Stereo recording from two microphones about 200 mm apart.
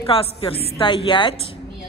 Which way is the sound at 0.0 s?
25° left (ahead or behind).